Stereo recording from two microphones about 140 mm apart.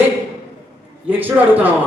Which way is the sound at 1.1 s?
15° right (ahead or behind).